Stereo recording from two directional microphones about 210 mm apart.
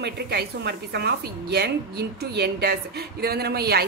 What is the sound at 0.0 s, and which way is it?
A woman's voice, 50° right (ahead or behind).